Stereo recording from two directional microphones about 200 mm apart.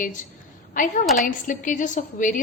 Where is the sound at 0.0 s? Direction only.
40° left (ahead or behind).